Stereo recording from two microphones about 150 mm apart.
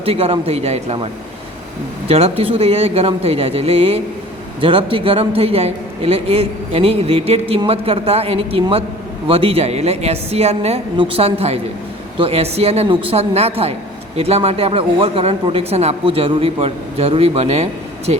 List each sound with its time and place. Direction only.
0.0 s speech: 40° right (ahead or behind)
2.0 s speech: 40° right (ahead or behind)